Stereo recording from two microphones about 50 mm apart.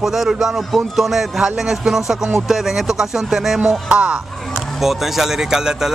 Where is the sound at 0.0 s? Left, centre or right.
Centre.